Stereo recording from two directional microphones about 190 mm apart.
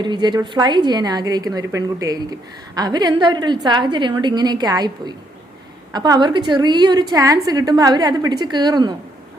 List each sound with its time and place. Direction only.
0.0 s a woman's voice: 25° right (ahead or behind)